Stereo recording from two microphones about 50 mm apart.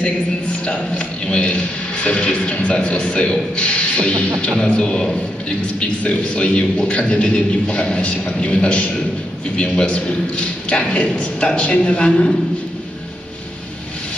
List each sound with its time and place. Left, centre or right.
0.0 s a man's voice: left